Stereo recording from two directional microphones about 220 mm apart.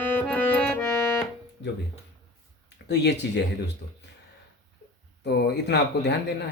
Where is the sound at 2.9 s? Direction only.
50° left (ahead or behind).